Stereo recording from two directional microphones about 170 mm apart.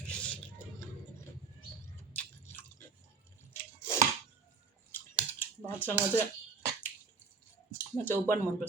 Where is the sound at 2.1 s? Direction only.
10° left (ahead or behind).